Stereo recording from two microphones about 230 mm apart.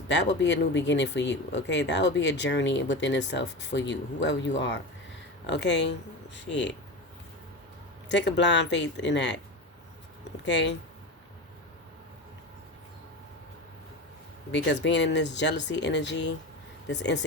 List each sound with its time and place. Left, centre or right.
0.1 s speech: left
8.1 s speech: left
10.4 s speech: left
14.5 s speech: left